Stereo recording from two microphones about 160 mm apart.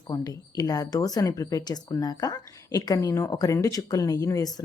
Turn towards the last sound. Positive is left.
turn(degrees=25)  # may be behind; listen again after turning